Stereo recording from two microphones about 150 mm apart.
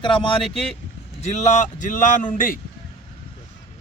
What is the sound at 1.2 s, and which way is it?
Speech, 50° left (ahead or behind).